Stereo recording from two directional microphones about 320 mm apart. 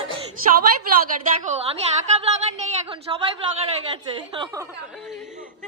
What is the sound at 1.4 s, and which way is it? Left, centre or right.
Speech, centre.